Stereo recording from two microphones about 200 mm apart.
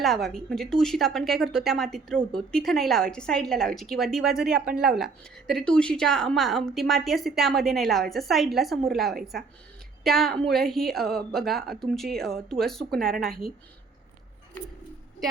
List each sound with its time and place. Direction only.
0.0 s a woman's voice: centre (ahead or behind)